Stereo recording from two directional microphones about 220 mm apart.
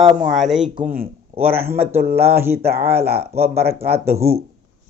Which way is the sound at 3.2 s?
30° right (ahead or behind).